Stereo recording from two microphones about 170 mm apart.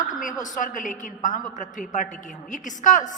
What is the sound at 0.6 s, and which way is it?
A woman's voice, 50° left (ahead or behind).